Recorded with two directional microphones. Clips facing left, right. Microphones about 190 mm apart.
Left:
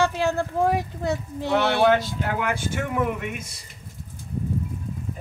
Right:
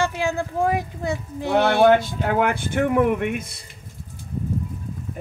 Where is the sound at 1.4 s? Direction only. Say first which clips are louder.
Right 4 dB; 50° right (ahead or behind).